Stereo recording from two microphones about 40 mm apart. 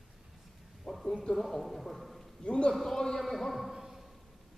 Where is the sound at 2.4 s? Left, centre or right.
Left.